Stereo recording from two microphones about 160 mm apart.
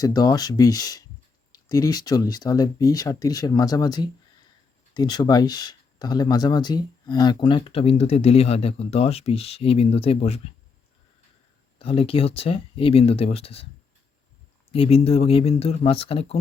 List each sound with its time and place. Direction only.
0.0 s speech: 25° left (ahead or behind); by 10.4 s 40° left (ahead or behind)
11.8 s speech: 35° left (ahead or behind)
14.7 s speech: 35° left (ahead or behind)